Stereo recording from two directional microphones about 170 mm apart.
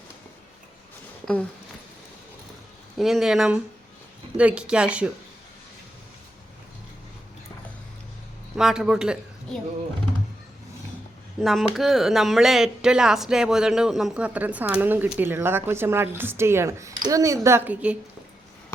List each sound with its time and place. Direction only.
1.2 s speech: 5° left (ahead or behind)
3.0 s speech: centre (ahead or behind)
8.5 s a woman's voice: 5° right (ahead or behind)
11.3 s speech: centre (ahead or behind)